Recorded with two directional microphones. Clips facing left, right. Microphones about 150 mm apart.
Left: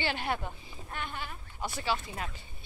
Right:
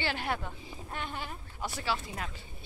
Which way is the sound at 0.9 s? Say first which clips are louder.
Even; 25° right (ahead or behind).